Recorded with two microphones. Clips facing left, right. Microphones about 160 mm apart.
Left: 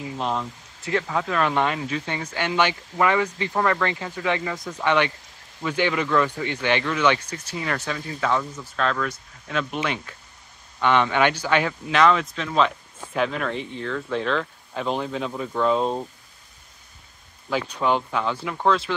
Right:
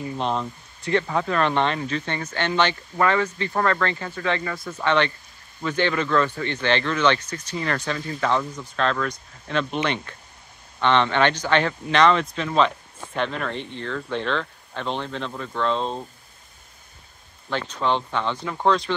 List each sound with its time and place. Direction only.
0.0 s speech: 5° left (ahead or behind)
17.5 s speech: 10° left (ahead or behind)